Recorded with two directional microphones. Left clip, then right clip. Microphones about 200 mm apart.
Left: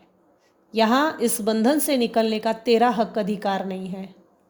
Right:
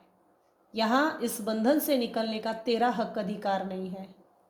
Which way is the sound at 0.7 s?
50° left (ahead or behind).